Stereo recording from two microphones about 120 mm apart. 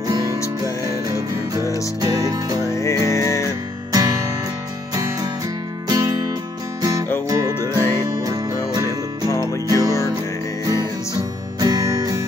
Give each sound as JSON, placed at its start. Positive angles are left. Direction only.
{"t": 0.4, "sound": "music", "side_deg": 25}
{"t": 2.0, "sound": "music", "side_deg": -30}
{"t": 2.6, "sound": "music", "side_deg": 25}
{"t": 3.9, "sound": "music", "side_deg": -30}
{"t": 9.3, "sound": "music", "side_deg": 25}
{"t": 9.7, "sound": "music", "side_deg": -30}